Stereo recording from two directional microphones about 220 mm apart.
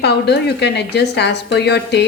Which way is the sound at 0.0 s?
50° left (ahead or behind).